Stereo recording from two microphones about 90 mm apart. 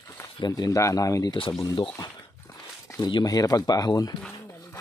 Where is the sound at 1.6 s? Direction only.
50° left (ahead or behind).